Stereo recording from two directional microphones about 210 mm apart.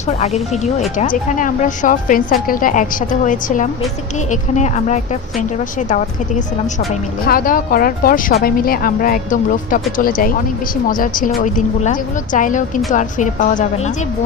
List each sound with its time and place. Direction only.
0.2 s a woman's voice: 30° left (ahead or behind)